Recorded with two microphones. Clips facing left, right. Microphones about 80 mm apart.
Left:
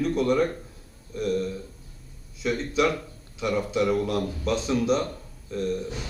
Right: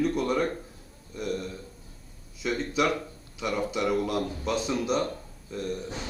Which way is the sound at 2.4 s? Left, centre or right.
Centre.